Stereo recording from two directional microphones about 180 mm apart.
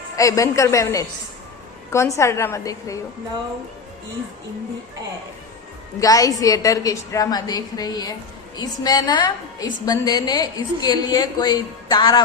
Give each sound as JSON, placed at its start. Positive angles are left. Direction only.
{"t": 0.2, "sound": "a woman's voice", "side_deg": 20}
{"t": 6.0, "sound": "a woman's voice", "side_deg": 20}